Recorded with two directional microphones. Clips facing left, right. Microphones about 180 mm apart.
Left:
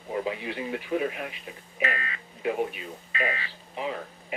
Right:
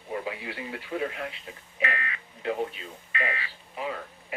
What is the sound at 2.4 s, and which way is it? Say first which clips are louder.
Speech: left 2 dB; 15° left (ahead or behind).